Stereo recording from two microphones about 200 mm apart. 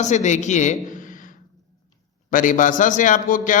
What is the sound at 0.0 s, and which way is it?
A woman's voice, 35° left (ahead or behind).